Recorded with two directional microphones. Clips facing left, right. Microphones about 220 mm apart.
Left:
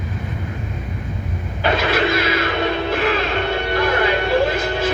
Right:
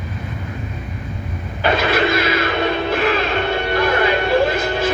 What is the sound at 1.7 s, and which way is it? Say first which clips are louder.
Music: right 1 dB; 50° right (ahead or behind).